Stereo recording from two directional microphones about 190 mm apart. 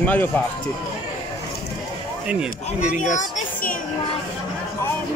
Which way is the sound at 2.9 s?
40° left (ahead or behind).